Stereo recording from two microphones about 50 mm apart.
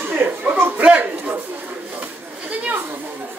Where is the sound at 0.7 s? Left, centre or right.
Right.